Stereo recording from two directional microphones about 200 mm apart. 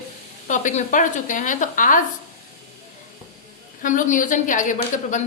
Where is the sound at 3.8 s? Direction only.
40° left (ahead or behind).